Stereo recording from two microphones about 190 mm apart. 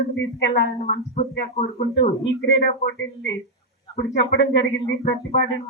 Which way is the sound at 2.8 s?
70° left (ahead or behind).